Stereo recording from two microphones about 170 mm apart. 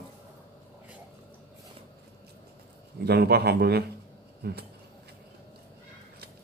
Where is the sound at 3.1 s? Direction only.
70° right (ahead or behind).